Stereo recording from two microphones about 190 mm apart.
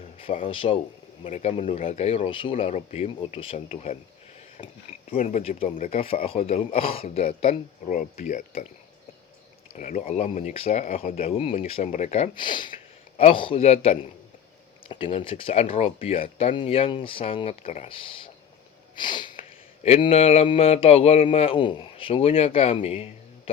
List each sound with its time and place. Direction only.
0.2 s speech: 30° left (ahead or behind)
5.4 s speech: 30° left (ahead or behind)
5.7 s speech: 40° left (ahead or behind)
9.7 s speech: 40° left (ahead or behind)